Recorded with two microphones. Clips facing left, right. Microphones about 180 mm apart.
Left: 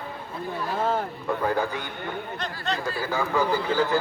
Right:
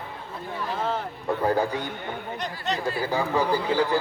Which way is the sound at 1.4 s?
35° right (ahead or behind).